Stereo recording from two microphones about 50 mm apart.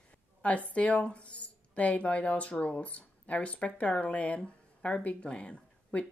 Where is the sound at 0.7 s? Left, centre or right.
Left.